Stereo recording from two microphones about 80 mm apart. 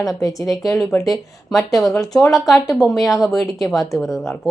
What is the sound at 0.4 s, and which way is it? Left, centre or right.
A woman's voice, centre.